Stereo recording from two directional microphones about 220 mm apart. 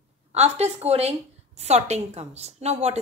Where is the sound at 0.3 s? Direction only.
30° right (ahead or behind).